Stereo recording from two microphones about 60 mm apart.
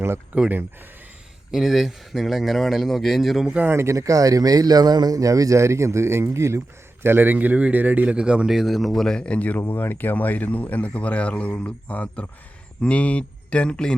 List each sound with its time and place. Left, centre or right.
0.3 s a man's voice: right
1.5 s speech: centre
3.8 s speech: right
7.0 s a man's voice: right; by 8.4 s centre
8.4 s speech: centre